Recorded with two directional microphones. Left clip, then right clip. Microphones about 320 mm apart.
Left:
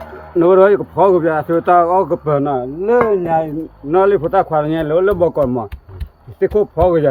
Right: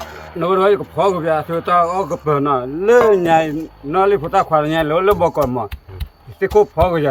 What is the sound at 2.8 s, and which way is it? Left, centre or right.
Speech, centre.